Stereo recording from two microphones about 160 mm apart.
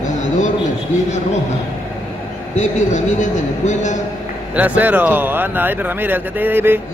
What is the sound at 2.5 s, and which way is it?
A man's voice, 50° left (ahead or behind).